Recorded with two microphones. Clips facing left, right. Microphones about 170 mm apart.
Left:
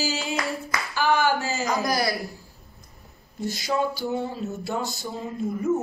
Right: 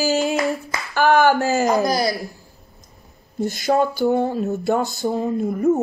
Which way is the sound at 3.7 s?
55° right (ahead or behind).